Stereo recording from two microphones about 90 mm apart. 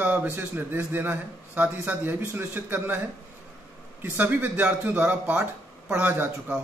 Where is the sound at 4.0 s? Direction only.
20° right (ahead or behind).